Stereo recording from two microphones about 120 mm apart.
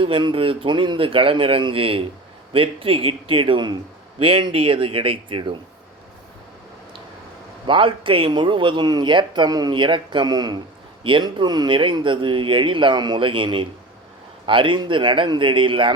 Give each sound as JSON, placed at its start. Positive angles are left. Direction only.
{"t": 0.0, "sound": "speech", "side_deg": -45}
{"t": 7.7, "sound": "speech", "side_deg": -45}